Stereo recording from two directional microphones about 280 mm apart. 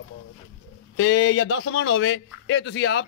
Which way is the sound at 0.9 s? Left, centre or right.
Left.